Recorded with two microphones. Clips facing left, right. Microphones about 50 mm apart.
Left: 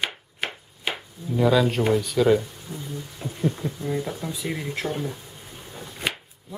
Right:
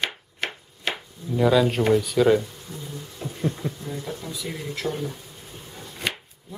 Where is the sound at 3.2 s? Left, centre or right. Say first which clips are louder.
Right 1 dB; centre.